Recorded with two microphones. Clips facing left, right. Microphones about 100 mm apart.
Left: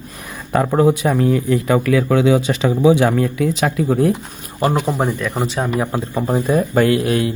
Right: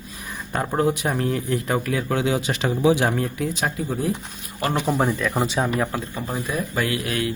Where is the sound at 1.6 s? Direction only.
90° left.